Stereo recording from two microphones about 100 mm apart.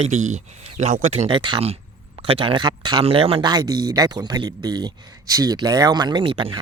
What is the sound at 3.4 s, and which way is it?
Speech, 45° right (ahead or behind).